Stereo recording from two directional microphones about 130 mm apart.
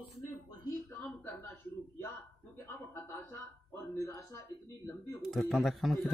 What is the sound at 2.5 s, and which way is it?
Speech, 20° left (ahead or behind).